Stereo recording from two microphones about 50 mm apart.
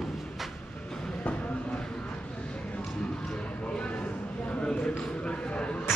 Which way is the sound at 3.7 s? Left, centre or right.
Left.